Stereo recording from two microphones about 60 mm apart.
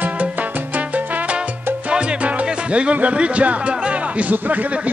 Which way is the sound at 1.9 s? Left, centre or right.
Centre.